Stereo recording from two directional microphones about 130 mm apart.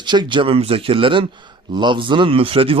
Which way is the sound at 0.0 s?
35° right (ahead or behind).